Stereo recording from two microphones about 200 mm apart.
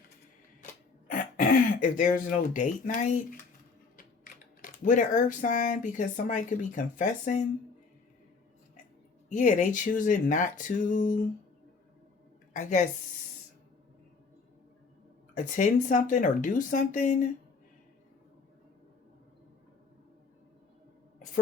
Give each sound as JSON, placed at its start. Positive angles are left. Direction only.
{"t": 1.1, "sound": "speech", "side_deg": 40}
{"t": 9.3, "sound": "speech", "side_deg": 35}
{"t": 12.5, "sound": "speech", "side_deg": 35}
{"t": 15.4, "sound": "speech", "side_deg": 40}